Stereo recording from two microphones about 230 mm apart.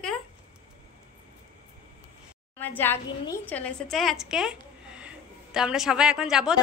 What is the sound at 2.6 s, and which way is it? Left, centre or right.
A woman's voice, centre.